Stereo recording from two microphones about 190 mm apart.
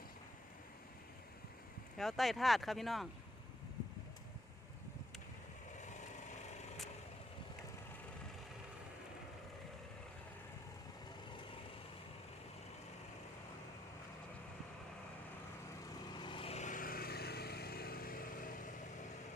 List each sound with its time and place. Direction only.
2.0 s speech: centre (ahead or behind)
5.8 s vehicle: 40° left (ahead or behind)
16.1 s vehicle: 25° left (ahead or behind); by 18.7 s 45° left (ahead or behind)